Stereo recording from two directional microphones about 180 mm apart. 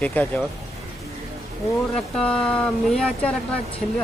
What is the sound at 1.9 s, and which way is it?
Speech, 5° left (ahead or behind).